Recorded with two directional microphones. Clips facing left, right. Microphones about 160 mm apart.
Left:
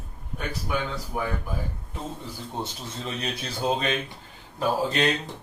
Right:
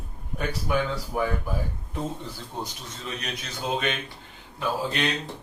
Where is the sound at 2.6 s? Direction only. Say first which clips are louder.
Left 3 dB; 30° left (ahead or behind).